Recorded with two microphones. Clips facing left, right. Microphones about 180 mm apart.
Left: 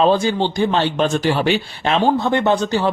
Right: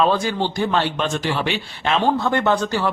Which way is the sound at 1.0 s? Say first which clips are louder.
Left 5 dB; 40° left (ahead or behind).